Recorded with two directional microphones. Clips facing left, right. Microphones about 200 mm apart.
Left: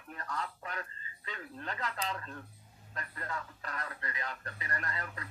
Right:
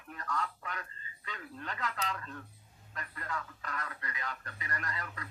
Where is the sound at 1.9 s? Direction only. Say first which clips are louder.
Even; 30° left (ahead or behind).